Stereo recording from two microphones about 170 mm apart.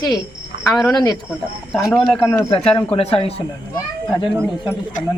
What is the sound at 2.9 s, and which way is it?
Speech, 35° left (ahead or behind).